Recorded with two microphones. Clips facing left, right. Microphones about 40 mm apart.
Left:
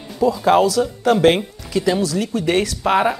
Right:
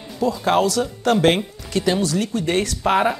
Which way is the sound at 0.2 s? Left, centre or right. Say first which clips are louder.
Left 4 dB; centre.